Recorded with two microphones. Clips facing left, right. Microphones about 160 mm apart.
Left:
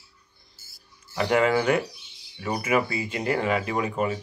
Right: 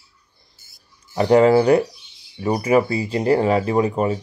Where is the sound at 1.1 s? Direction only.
35° right (ahead or behind).